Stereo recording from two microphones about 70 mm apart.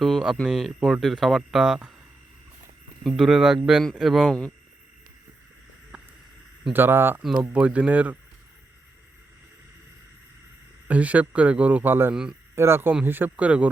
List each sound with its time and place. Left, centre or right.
0.0 s speech: centre
3.0 s speech: centre
4.3 s speech: centre
5.9 s boat: centre
6.7 s speech: right
7.5 s speech: right
10.8 s speech: right
12.1 s speech: centre
12.5 s speech: right
13.1 s speech: right